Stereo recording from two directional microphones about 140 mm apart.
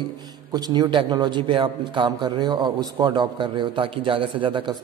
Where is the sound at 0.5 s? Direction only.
30° right (ahead or behind).